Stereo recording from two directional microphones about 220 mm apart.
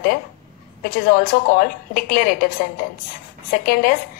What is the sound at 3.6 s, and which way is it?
Speech, 40° left (ahead or behind).